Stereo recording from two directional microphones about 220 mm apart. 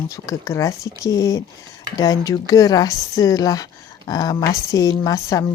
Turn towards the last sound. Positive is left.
turn(degrees=15)  # may be behind; listen again after turning